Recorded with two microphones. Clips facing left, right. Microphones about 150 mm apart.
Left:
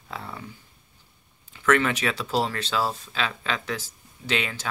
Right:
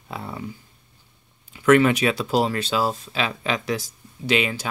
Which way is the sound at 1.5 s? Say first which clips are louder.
Right 6 dB; 15° right (ahead or behind).